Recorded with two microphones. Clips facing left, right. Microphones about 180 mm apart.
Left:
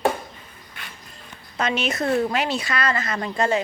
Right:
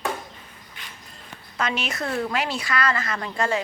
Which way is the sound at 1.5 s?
20° left (ahead or behind).